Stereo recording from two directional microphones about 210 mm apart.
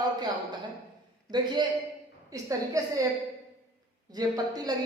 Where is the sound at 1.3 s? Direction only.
20° right (ahead or behind).